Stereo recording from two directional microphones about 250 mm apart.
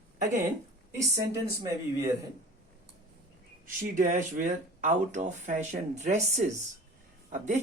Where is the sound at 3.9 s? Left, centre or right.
Right.